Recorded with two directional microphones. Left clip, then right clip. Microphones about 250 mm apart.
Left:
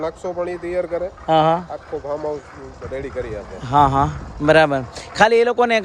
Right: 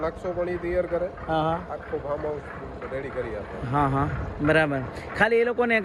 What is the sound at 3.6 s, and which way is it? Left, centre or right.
A man's voice, centre.